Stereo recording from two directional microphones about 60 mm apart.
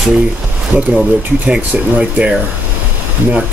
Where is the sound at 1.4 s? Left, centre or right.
Centre.